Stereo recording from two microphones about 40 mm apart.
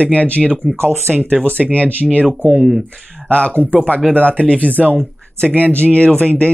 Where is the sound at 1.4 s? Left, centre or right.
Right.